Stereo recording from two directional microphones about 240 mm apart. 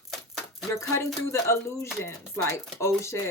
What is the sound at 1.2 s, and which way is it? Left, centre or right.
Speech, centre.